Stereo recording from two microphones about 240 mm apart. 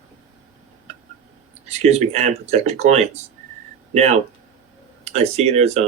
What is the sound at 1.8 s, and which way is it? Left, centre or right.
Speech, right.